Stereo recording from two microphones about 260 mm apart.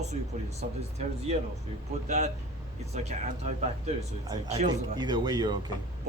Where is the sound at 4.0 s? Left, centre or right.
Right.